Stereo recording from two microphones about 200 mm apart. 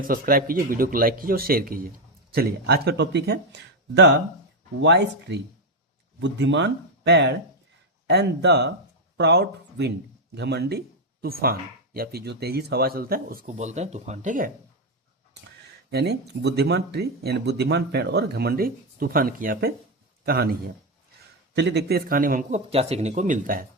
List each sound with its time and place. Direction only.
0.0 s speech: 45° right (ahead or behind)
15.9 s speech: 55° right (ahead or behind)